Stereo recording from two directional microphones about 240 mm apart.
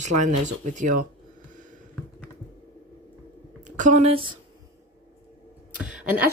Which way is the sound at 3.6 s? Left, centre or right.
Right.